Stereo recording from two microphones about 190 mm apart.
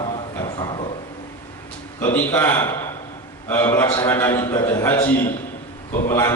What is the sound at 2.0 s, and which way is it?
A man's voice, 10° left (ahead or behind).